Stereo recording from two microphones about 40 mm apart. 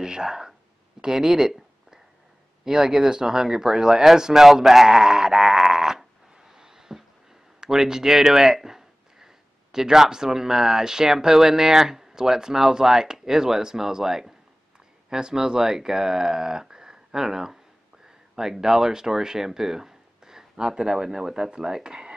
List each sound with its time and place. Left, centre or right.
0.0 s speech: centre
6.5 s a sound: centre
7.6 s speech: centre